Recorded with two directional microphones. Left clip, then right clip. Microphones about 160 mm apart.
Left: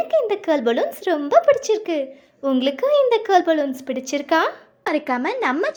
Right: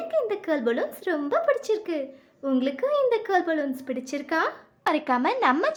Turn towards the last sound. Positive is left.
turn(degrees=10)  # may be behind; listen again after turning